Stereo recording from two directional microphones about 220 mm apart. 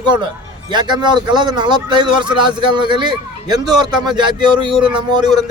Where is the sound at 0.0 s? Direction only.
20° right (ahead or behind).